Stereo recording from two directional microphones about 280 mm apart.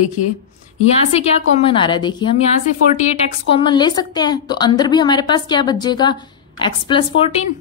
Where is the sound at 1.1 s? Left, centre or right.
Left.